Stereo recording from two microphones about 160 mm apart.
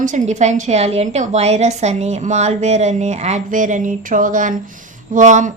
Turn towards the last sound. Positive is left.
turn(degrees=-50)  # may be behind; listen again after turning